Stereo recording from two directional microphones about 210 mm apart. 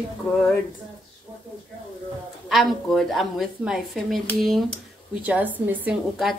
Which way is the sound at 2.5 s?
Centre (ahead or behind).